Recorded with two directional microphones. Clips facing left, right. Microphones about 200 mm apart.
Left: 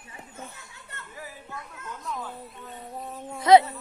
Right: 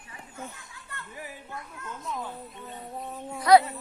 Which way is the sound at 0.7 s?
25° left (ahead or behind).